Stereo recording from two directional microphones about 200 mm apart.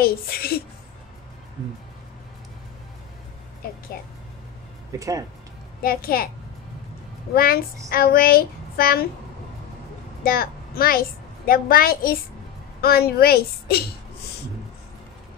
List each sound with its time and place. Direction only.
0.0 s speech: 50° left (ahead or behind)
3.9 s speech: 45° left (ahead or behind)
4.9 s speech: 15° right (ahead or behind)
5.8 s speech: 50° left (ahead or behind)
7.3 s speech: 45° left (ahead or behind)
10.2 s a child's voice: 50° left (ahead or behind)